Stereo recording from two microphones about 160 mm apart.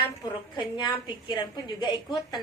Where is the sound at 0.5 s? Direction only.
30° left (ahead or behind).